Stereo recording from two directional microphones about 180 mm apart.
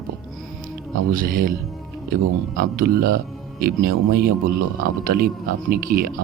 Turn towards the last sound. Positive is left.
turn(degrees=-50)  # may be behind; listen again after turning